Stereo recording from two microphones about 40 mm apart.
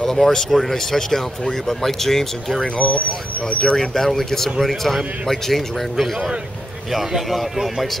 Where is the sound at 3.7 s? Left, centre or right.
Centre.